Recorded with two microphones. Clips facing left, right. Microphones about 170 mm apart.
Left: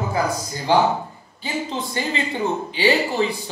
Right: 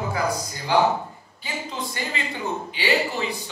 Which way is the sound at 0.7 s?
30° left (ahead or behind).